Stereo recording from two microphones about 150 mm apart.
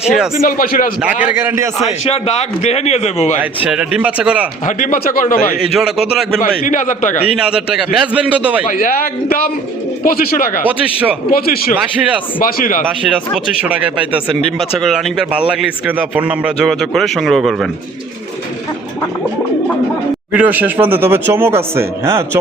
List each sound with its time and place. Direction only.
0.4 s a man's voice: 75° left (ahead or behind)
1.2 s speech: 15° right (ahead or behind)
1.8 s a man's voice: 45° left (ahead or behind)
3.6 s speech: 5° right (ahead or behind)
4.6 s a man's voice: 65° left (ahead or behind)
5.7 s a man's voice: centre (ahead or behind)
6.4 s a man's voice: 60° left (ahead or behind)
7.3 s a man's voice: 5° right (ahead or behind)
8.6 s a man's voice: 70° left (ahead or behind)
11.3 s speech: 85° left
12.4 s a man's voice: 70° left (ahead or behind)
13.3 s a man's voice: 5° right (ahead or behind)
16.6 s a man's voice: centre (ahead or behind)
20.3 s speech: 10° right (ahead or behind)